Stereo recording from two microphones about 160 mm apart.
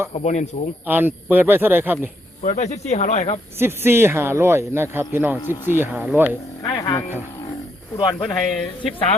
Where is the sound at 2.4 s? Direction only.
50° left (ahead or behind).